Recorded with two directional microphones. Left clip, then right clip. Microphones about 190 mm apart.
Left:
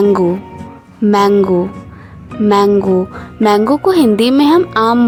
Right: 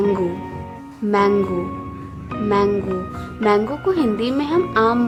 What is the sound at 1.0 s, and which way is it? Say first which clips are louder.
Speech: left 7 dB; 45° left (ahead or behind).